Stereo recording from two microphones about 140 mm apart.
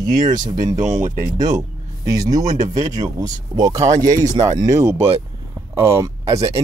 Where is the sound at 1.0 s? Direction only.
60° right (ahead or behind).